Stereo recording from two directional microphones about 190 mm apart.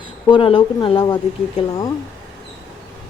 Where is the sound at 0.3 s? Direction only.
30° left (ahead or behind).